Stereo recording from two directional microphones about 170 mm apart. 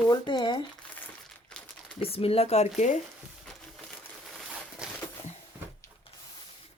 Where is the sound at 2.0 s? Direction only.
35° left (ahead or behind).